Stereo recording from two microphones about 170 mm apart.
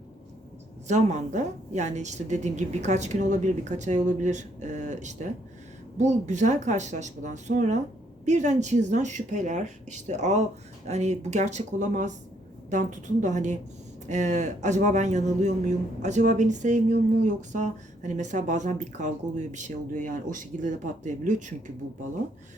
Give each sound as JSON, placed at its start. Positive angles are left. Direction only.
{"t": 0.9, "sound": "a man's voice", "side_deg": -45}